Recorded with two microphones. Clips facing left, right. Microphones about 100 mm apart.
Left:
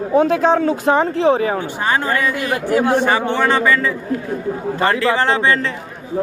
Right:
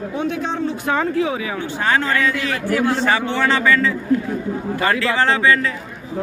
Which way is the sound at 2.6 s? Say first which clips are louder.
Left 3 dB; 20° left (ahead or behind).